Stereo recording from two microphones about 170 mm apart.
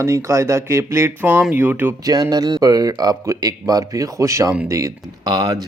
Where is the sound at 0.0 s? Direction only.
15° right (ahead or behind).